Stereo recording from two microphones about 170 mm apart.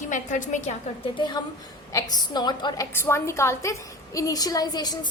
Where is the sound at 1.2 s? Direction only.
25° left (ahead or behind).